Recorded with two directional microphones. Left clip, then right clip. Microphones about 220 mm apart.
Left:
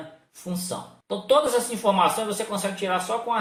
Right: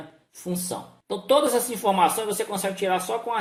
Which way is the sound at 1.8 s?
45° right (ahead or behind).